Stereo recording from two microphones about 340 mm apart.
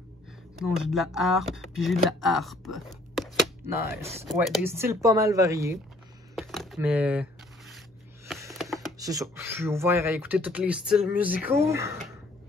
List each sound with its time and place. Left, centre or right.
0.6 s speech: centre
2.0 s a sound: centre
4.0 s speech: centre
4.3 s speech: centre
6.3 s a sound: centre
8.3 s music: centre
8.9 s speech: centre